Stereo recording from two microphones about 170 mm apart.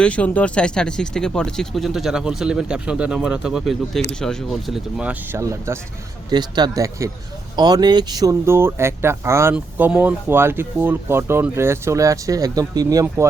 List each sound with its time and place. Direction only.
0.0 s speech: 5° left (ahead or behind); by 13.2 s 20° right (ahead or behind)